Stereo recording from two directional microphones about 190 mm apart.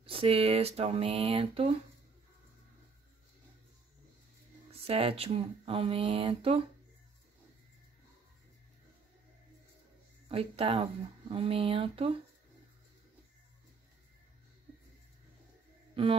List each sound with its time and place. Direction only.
0.0 s speech: 30° right (ahead or behind)
4.8 s speech: 30° right (ahead or behind)
10.2 s speech: 30° right (ahead or behind)